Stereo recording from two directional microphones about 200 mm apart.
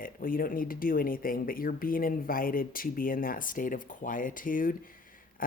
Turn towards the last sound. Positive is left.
turn(degrees=45)  # may be behind; listen again after turning